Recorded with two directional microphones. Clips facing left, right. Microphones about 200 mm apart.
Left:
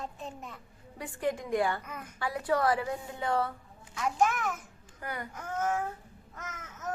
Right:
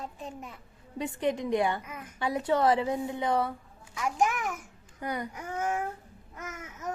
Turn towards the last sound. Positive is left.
turn(degrees=-15)  # may be behind; listen again after turning